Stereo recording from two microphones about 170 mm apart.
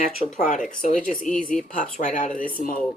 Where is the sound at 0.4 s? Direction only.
50° left (ahead or behind).